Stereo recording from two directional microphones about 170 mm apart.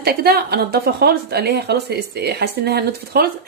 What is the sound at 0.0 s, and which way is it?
A woman's voice, 65° right (ahead or behind).